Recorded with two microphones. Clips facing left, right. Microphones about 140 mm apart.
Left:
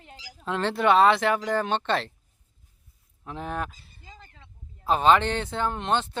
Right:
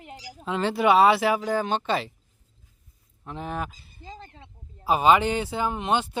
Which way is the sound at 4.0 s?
30° right (ahead or behind).